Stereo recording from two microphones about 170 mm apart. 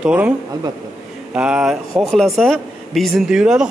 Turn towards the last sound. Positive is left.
turn(degrees=-5)  # may be behind; listen again after turning